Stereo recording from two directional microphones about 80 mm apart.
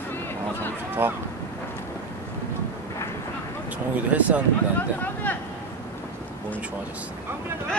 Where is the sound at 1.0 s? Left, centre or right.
Right.